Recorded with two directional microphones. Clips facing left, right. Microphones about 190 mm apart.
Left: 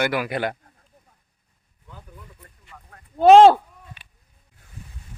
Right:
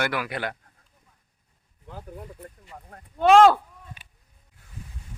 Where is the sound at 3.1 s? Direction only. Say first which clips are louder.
Left 5 dB; 35° left (ahead or behind).